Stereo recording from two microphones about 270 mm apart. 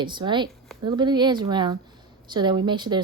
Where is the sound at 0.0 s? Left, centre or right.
Centre.